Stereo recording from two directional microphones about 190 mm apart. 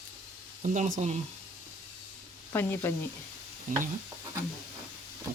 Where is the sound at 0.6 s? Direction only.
40° right (ahead or behind).